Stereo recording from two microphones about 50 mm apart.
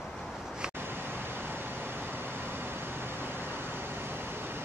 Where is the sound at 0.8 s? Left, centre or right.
Right.